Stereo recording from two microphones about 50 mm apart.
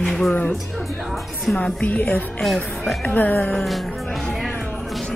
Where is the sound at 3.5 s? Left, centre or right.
Centre.